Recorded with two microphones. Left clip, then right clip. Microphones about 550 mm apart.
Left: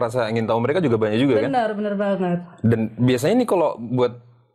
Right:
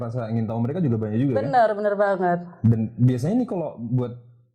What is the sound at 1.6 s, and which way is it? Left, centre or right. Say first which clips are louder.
Speech: right 3 dB; right.